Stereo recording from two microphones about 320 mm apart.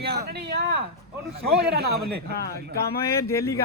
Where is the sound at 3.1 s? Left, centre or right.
Centre.